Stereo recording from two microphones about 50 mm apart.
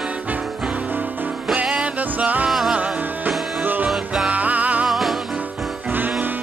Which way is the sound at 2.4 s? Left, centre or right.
Centre.